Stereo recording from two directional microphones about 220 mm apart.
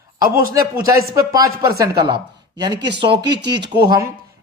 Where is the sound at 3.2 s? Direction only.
50° right (ahead or behind).